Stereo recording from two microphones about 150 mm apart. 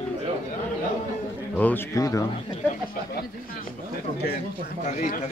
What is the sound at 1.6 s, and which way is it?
Speech, 15° left (ahead or behind).